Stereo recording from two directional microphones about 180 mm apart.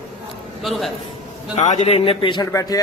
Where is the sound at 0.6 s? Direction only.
Centre (ahead or behind).